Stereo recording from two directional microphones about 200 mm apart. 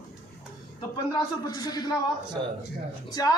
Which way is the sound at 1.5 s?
20° left (ahead or behind).